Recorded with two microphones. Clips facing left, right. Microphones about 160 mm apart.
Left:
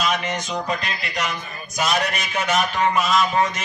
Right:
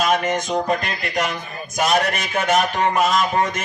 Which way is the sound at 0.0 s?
50° right (ahead or behind).